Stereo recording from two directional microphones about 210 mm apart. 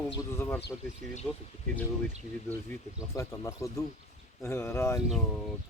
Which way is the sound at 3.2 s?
15° left (ahead or behind).